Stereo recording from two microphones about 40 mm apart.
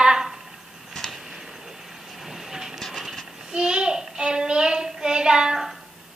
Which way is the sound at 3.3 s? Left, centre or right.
Centre.